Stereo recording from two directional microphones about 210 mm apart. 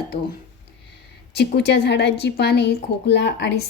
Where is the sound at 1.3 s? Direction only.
50° left (ahead or behind).